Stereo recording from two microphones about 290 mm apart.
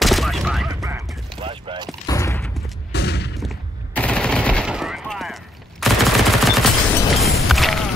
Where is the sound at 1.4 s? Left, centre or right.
Centre.